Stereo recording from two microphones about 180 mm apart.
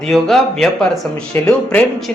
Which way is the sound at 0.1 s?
Centre (ahead or behind).